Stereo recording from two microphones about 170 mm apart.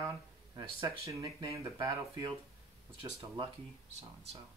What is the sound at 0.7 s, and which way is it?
Speech, 20° right (ahead or behind).